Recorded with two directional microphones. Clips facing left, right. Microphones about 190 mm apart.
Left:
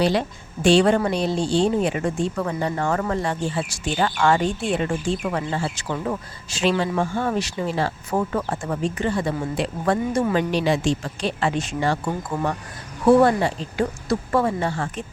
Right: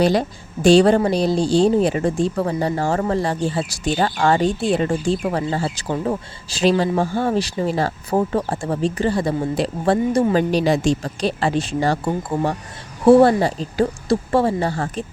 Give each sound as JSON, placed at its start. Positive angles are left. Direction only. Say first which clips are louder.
{"t": 0.0, "sound": "a woman's voice", "louder": "right 3 dB", "side_deg": -40}